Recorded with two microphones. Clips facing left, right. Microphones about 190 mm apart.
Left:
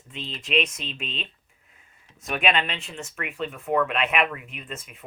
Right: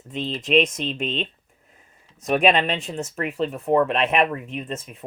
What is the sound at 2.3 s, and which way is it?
Speech, 40° right (ahead or behind).